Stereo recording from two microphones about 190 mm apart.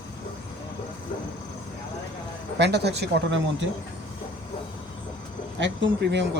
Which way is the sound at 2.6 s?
60° right (ahead or behind).